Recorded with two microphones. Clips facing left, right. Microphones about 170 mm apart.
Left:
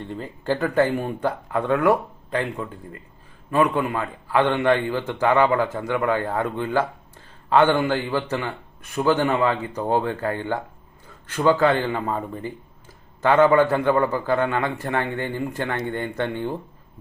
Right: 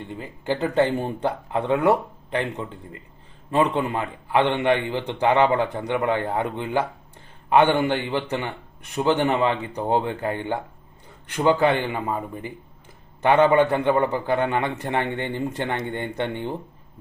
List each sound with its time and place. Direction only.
0.0 s a man's voice: 15° right (ahead or behind)